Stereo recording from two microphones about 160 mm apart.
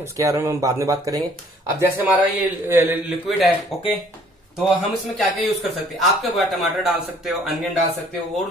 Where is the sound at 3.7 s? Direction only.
Centre (ahead or behind).